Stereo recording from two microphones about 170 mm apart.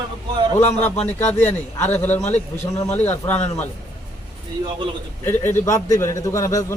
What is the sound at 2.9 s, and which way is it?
Speech, 10° left (ahead or behind).